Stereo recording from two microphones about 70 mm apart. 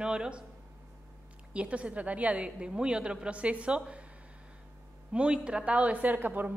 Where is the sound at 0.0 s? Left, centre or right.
Centre.